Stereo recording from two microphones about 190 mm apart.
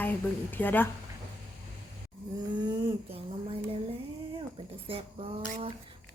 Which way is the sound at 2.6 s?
25° right (ahead or behind).